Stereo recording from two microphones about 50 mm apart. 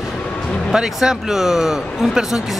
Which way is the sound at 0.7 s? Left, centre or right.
Centre.